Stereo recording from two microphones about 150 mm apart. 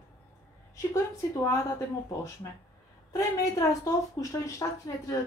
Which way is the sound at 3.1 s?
20° left (ahead or behind).